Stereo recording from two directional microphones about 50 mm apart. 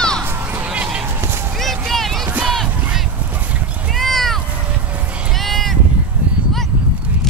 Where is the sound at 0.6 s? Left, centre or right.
Right.